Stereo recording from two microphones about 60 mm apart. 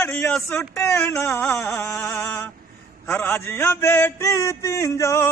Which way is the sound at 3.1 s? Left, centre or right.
Left.